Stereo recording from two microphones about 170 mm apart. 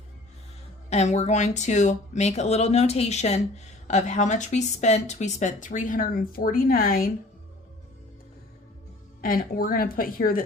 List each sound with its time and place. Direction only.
0.9 s speech: 40° left (ahead or behind); by 7.1 s 60° left (ahead or behind)
9.2 s a woman's voice: 60° left (ahead or behind)